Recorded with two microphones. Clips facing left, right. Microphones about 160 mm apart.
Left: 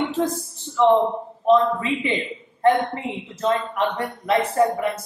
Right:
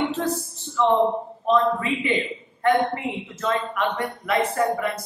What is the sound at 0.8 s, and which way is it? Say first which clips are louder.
A woman's voice: left 2 dB; 15° left (ahead or behind).